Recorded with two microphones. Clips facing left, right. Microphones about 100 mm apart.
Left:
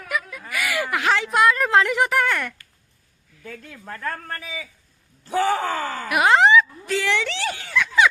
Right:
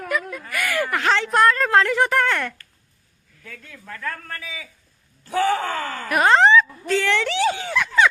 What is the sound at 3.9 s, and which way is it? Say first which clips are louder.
A man's voice: left 1 dB; 25° left (ahead or behind).